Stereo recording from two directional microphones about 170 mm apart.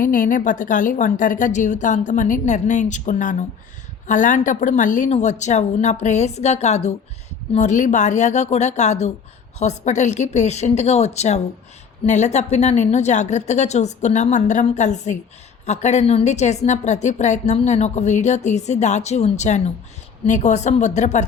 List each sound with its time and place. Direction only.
0.0 s a woman's voice: 50° left (ahead or behind)